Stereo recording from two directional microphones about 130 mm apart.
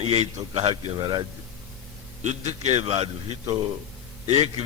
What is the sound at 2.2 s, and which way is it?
Speech, 65° right (ahead or behind).